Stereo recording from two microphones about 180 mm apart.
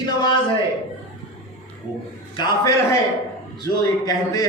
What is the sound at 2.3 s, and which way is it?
A man's voice, 25° left (ahead or behind).